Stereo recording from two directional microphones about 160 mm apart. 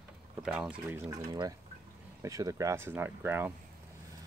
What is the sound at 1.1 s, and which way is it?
Speech, 25° right (ahead or behind).